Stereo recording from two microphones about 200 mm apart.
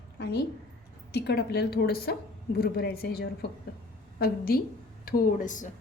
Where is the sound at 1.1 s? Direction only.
55° left (ahead or behind).